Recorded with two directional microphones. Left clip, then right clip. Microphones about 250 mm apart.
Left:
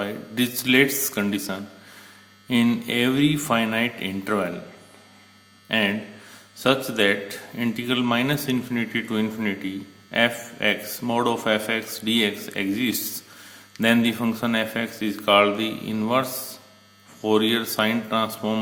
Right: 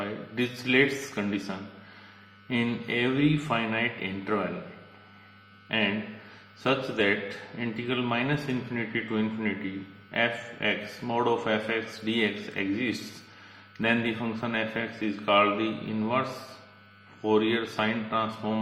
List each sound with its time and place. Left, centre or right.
0.0 s a man's voice: left
5.6 s a man's voice: left
17.2 s a man's voice: left